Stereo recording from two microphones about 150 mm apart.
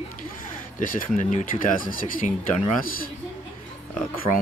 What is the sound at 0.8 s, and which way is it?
Speech, 60° left (ahead or behind).